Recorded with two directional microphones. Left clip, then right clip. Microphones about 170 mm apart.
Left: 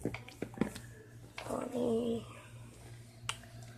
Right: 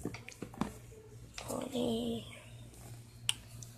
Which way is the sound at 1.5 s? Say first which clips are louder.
Left 2 dB; 5° right (ahead or behind).